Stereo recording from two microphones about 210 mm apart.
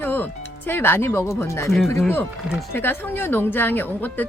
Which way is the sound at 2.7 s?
10° left (ahead or behind).